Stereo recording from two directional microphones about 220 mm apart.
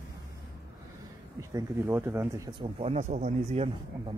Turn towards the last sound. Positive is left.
turn(degrees=-30)  # may be behind; listen again after turning